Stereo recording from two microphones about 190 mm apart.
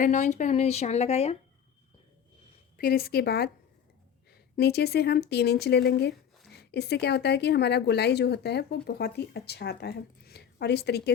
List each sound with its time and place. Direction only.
0.0 s speech: 40° left (ahead or behind)
2.7 s speech: 50° left (ahead or behind)